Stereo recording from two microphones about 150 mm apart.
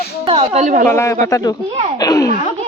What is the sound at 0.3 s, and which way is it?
Speech, 45° right (ahead or behind).